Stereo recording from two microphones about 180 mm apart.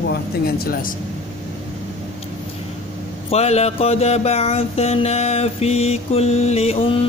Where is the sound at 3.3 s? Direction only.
35° left (ahead or behind).